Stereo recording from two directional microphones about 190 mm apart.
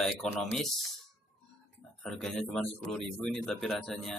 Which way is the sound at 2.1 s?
Centre (ahead or behind).